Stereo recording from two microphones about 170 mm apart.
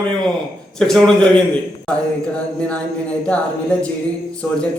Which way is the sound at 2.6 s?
5° left (ahead or behind).